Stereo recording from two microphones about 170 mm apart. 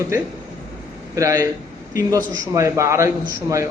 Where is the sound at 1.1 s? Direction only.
20° right (ahead or behind).